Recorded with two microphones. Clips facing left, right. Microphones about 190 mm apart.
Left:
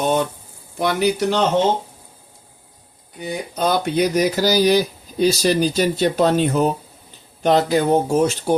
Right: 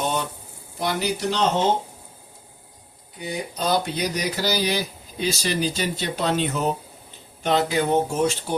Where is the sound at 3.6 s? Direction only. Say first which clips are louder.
Left 6 dB; 50° left (ahead or behind).